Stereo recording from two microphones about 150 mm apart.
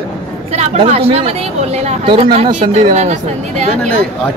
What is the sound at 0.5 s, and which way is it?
A woman's voice, 45° right (ahead or behind).